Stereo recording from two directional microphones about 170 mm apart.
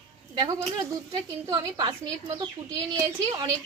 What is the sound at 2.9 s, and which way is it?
Speech, 20° right (ahead or behind).